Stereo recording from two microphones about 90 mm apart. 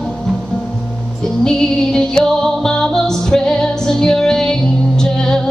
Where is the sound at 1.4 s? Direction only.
5° left (ahead or behind).